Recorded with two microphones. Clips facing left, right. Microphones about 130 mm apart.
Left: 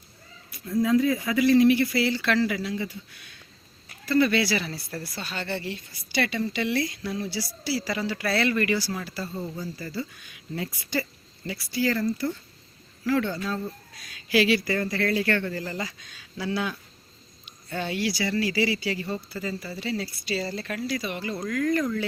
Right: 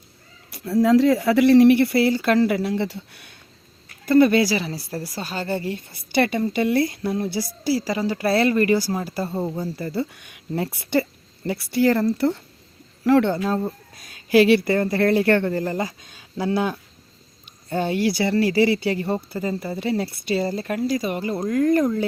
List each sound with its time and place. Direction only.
0.5 s speech: 80° right; by 1.9 s 65° right (ahead or behind)
2.0 s speech: 45° right (ahead or behind); by 3.2 s 70° right (ahead or behind)
4.0 s speech: 50° right (ahead or behind)
20.6 s speech: 40° right (ahead or behind)
21.3 s speech: 30° right (ahead or behind)